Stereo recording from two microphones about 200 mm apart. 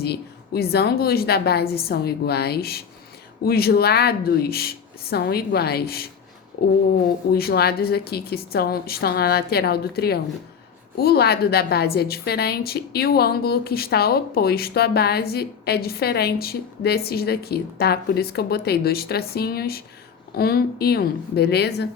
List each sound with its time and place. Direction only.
0.0 s a woman's voice: 50° left (ahead or behind)
7.3 s a woman's voice: 50° left (ahead or behind)